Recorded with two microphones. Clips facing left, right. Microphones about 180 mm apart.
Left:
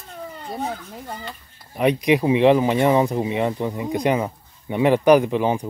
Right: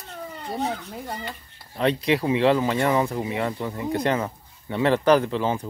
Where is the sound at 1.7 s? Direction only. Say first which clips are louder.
Left 4 dB; 15° left (ahead or behind).